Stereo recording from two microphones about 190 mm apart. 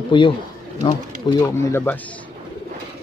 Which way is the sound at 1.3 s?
15° left (ahead or behind).